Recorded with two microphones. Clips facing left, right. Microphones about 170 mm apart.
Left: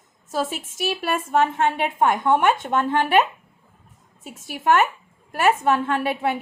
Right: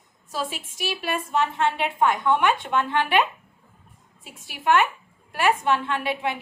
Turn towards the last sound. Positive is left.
turn(degrees=40)  # may be behind; listen again after turning